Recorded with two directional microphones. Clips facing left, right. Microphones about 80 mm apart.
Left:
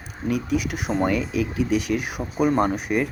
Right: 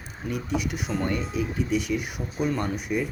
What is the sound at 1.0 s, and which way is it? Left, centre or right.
Speech, left.